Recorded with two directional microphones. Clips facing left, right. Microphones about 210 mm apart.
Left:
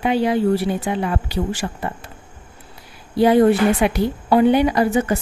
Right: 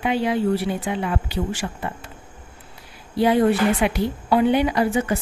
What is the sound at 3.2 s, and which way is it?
A woman's voice, 40° left (ahead or behind).